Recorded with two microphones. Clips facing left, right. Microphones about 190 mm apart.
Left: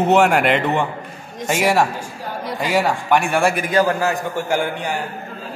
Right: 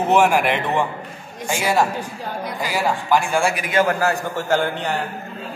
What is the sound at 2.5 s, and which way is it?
A man's voice, 65° left (ahead or behind).